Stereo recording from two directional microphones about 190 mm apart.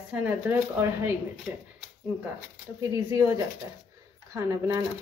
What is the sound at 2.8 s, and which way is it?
Speech, 15° right (ahead or behind).